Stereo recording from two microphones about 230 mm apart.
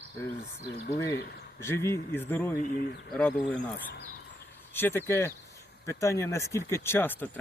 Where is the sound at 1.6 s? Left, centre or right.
Centre.